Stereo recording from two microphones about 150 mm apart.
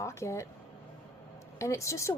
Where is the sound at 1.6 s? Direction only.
20° left (ahead or behind).